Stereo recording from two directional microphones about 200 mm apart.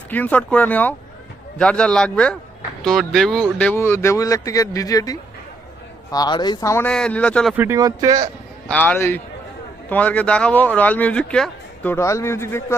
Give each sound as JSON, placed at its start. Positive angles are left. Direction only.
{"t": 0.1, "sound": "speech", "side_deg": 10}
{"t": 7.5, "sound": "speech", "side_deg": -10}
{"t": 8.6, "sound": "speech", "side_deg": 5}